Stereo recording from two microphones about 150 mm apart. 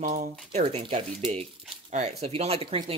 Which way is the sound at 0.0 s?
50° right (ahead or behind).